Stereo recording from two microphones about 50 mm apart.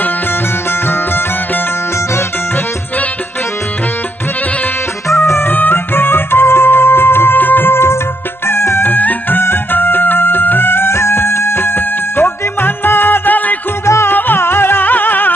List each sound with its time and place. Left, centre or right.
5.2 s music: left
5.5 s music: left
8.9 s music: left
13.8 s music: left
14.1 s music: left